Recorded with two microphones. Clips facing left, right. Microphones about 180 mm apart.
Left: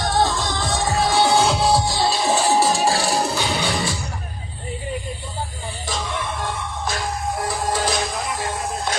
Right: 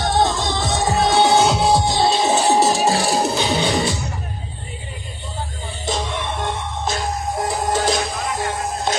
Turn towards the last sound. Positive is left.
turn(degrees=-25)  # may be behind; listen again after turning